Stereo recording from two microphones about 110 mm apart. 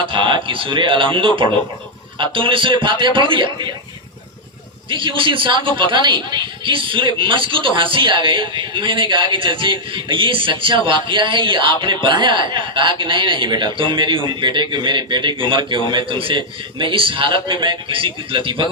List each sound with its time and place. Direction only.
0.1 s a woman's voice: 50° right (ahead or behind)
4.9 s a woman's voice: 50° right (ahead or behind)